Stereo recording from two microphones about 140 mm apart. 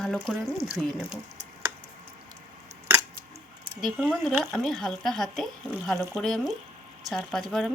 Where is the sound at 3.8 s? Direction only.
Centre (ahead or behind).